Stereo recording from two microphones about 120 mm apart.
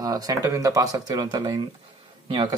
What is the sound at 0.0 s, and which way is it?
Speech, 30° right (ahead or behind).